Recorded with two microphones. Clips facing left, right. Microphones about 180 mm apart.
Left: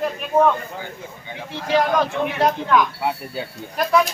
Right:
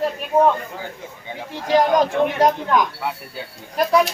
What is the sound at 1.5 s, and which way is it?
Speech, 40° right (ahead or behind).